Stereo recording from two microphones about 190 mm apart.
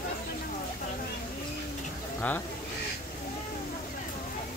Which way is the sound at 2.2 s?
10° left (ahead or behind).